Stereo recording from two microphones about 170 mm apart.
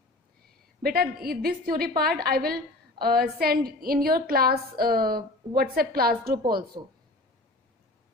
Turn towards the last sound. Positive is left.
turn(degrees=-60)  # may be behind; listen again after turning